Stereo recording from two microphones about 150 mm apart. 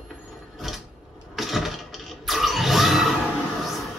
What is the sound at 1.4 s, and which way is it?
Vehicle, centre (ahead or behind).